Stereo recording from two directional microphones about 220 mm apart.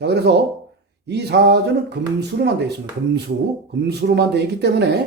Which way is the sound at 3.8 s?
50° right (ahead or behind).